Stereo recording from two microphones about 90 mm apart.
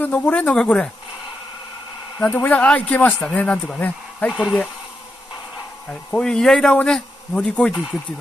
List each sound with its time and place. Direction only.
0.0 s speech: 15° left (ahead or behind)
2.1 s speech: 20° left (ahead or behind)
4.3 s speech: 5° right (ahead or behind)
5.9 s speech: 10° left (ahead or behind)